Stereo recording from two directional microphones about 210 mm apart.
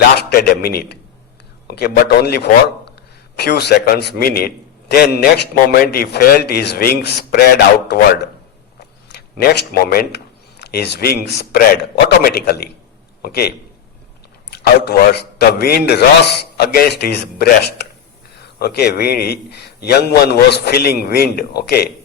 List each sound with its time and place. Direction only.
0.2 s a man's voice: 45° left (ahead or behind)
14.6 s a man's voice: 50° left (ahead or behind)